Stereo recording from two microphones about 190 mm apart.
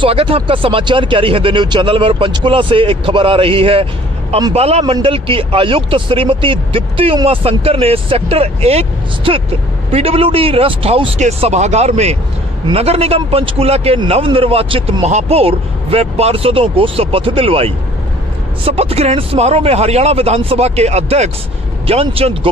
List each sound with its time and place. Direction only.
0.0 s a man's voice: 30° right (ahead or behind)